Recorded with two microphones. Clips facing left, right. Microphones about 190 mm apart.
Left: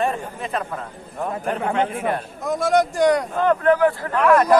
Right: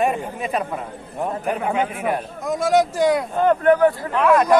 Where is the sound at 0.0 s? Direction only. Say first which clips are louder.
Right 2 dB; 15° right (ahead or behind).